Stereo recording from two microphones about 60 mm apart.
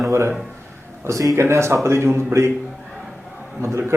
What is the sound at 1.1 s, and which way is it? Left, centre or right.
Speech, right.